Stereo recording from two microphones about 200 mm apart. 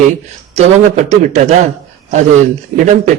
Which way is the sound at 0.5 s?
35° right (ahead or behind).